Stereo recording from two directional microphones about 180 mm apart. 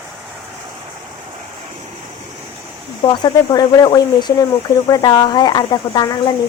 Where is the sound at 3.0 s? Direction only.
25° left (ahead or behind).